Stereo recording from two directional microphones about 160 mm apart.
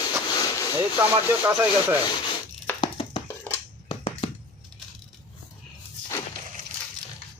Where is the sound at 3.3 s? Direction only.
15° left (ahead or behind).